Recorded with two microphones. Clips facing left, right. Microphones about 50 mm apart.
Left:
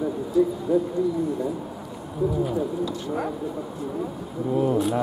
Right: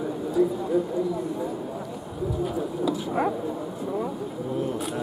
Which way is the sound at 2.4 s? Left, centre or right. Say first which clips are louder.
Left 1 dB; centre.